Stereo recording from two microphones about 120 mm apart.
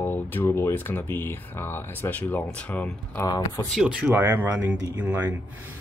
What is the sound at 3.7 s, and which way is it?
Speech, 10° right (ahead or behind).